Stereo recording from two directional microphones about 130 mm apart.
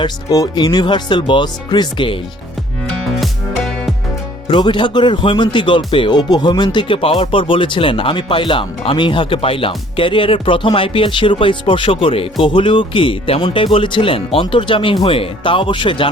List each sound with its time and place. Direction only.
0.0 s speech: 30° left (ahead or behind)
4.4 s speech: 40° left (ahead or behind)